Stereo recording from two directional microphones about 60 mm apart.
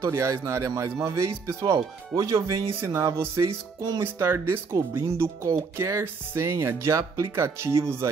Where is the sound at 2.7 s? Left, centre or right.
Right.